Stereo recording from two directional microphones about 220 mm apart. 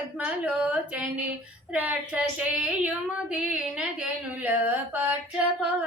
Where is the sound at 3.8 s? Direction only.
5° right (ahead or behind).